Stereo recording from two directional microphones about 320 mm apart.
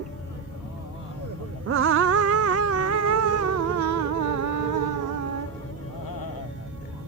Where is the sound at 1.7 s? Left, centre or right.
Right.